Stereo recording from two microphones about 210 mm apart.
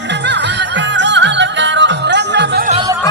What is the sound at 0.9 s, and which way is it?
Music, 60° right (ahead or behind).